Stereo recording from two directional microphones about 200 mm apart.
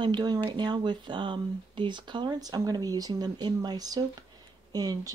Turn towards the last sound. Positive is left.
turn(degrees=-20)  # may be behind; listen again after turning